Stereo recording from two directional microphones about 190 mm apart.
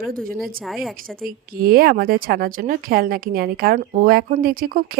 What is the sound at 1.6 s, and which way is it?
A woman's voice, 50° right (ahead or behind).